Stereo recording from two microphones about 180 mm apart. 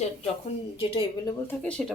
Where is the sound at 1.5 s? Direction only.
5° left (ahead or behind).